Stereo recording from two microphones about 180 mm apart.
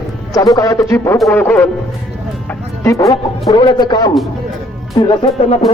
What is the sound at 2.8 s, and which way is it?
A man's voice, 15° left (ahead or behind).